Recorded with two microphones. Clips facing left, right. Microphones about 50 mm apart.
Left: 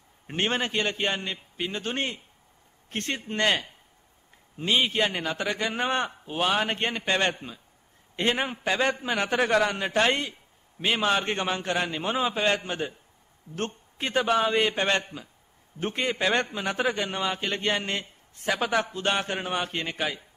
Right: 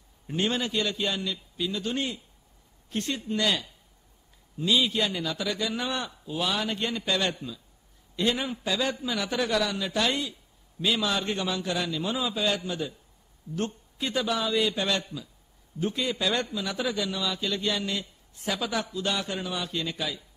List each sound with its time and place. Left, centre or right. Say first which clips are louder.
0.3 s a man's voice: left 1 dB; left